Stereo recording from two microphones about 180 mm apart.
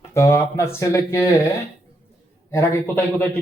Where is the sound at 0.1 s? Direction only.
15° left (ahead or behind).